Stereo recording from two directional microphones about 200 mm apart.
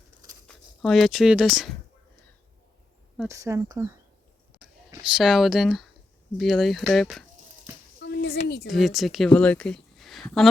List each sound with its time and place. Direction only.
0.4 s speech: centre (ahead or behind)
3.2 s speech: 15° right (ahead or behind); by 7.3 s centre (ahead or behind)
8.0 s a sound: 55° left (ahead or behind)
8.6 s speech: centre (ahead or behind)